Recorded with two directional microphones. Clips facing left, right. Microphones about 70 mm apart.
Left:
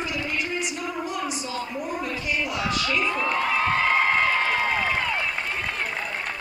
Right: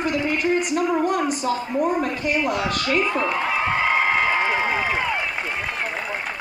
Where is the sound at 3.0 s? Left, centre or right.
Centre.